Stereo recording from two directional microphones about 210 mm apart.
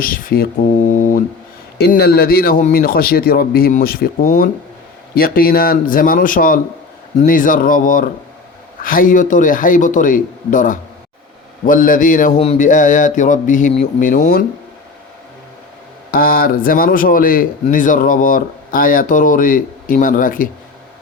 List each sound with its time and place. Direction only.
0.0 s a man's voice: 45° left (ahead or behind)
0.9 s mantra: 40° left (ahead or behind)
1.8 s a man's voice: 50° left (ahead or behind)
16.1 s speech: 45° left (ahead or behind)